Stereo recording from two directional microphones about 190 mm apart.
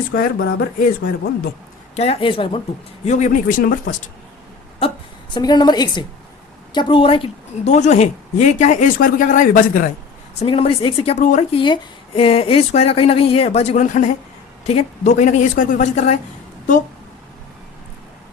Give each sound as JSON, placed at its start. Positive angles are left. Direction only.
{"t": 0.1, "sound": "speech", "side_deg": 50}
{"t": 2.0, "sound": "a woman's voice", "side_deg": 30}
{"t": 3.0, "sound": "speech", "side_deg": 40}
{"t": 4.8, "sound": "a woman's voice", "side_deg": 30}
{"t": 10.4, "sound": "a woman's voice", "side_deg": 30}
{"t": 11.5, "sound": "a woman's voice", "side_deg": 25}